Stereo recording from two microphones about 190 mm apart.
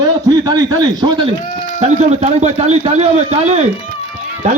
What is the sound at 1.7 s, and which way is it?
A man's voice, 35° right (ahead or behind).